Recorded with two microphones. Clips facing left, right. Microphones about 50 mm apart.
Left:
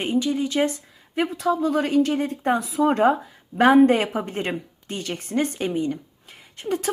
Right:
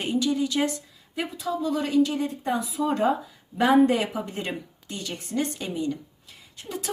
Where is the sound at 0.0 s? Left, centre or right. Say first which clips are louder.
Left 2 dB; left.